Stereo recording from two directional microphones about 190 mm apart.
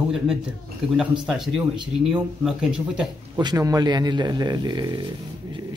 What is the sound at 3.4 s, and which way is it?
A man's voice, 20° right (ahead or behind).